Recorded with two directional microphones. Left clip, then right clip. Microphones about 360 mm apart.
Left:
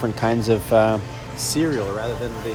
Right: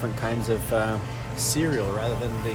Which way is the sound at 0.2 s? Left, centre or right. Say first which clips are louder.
Left 8 dB; left.